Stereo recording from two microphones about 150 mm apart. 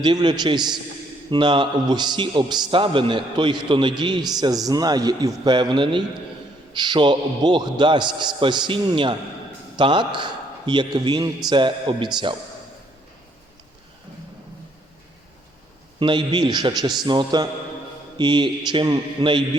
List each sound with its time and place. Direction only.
0.0 s a man's voice: 30° right (ahead or behind)
16.0 s a man's voice: 35° right (ahead or behind)